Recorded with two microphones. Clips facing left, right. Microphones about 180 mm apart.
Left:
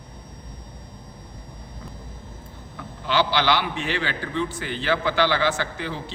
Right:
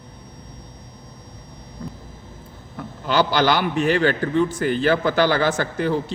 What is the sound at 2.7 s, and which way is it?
A man's voice, 45° right (ahead or behind).